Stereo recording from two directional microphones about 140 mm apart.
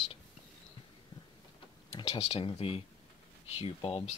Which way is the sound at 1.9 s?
35° left (ahead or behind).